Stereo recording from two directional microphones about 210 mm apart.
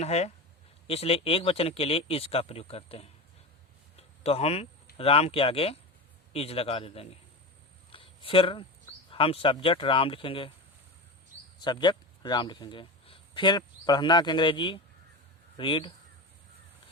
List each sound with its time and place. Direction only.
0.0 s speech: 30° left (ahead or behind)
4.2 s speech: 30° left (ahead or behind)
7.9 s a sound: 25° left (ahead or behind)
9.0 s speech: 25° left (ahead or behind)
11.6 s a man's voice: 20° left (ahead or behind)